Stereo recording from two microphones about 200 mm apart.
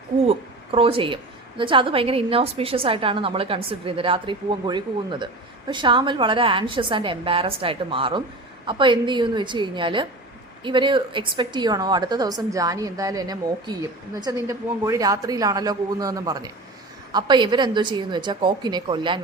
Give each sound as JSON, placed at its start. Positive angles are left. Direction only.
{"t": 0.3, "sound": "a woman's voice", "side_deg": -30}